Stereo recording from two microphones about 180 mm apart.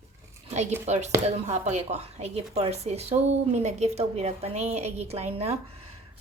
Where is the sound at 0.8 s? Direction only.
40° right (ahead or behind).